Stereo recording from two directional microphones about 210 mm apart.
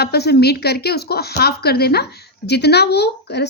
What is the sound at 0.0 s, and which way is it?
Speech, 50° left (ahead or behind).